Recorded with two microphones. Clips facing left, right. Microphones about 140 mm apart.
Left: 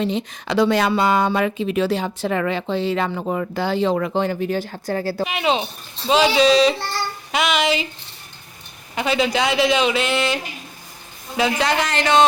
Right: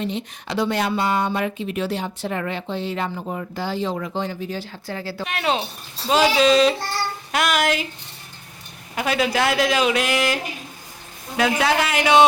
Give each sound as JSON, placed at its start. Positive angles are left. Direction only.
{"t": 0.0, "sound": "speech", "side_deg": 90}
{"t": 5.2, "sound": "speech", "side_deg": 5}
{"t": 9.0, "sound": "a man's voice", "side_deg": -5}